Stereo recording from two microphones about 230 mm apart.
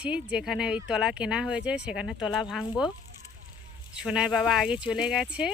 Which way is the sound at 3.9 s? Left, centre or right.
Centre.